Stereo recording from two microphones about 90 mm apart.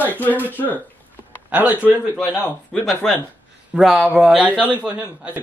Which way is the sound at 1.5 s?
15° right (ahead or behind).